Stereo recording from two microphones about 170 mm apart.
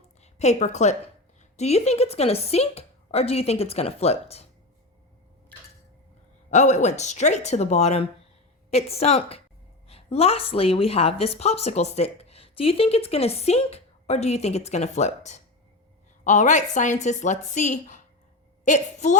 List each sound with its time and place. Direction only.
0.2 s a woman's voice: 40° left (ahead or behind)
5.5 s a sound: 10° left (ahead or behind)
6.5 s a woman's voice: 45° left (ahead or behind)